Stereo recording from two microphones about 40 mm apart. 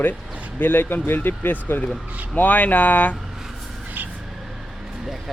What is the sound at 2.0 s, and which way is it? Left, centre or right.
Speech, right.